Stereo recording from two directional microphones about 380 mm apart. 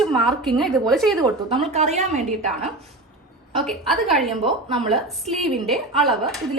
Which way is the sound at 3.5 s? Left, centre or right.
Centre.